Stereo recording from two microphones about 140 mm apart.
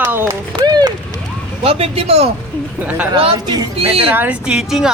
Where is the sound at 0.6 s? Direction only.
30° right (ahead or behind).